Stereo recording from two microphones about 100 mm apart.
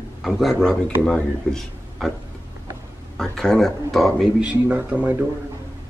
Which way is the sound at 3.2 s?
5° left (ahead or behind).